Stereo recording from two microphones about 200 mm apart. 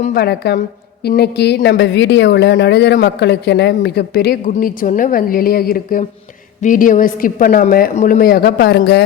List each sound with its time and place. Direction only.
0.0 s speech: 50° left (ahead or behind)